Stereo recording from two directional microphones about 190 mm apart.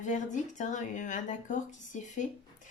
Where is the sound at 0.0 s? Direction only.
40° left (ahead or behind).